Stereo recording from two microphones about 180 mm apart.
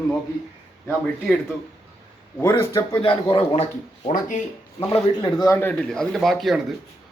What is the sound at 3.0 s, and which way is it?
Speech, 30° left (ahead or behind).